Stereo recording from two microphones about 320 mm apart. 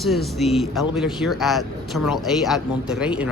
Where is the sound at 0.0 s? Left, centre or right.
Centre.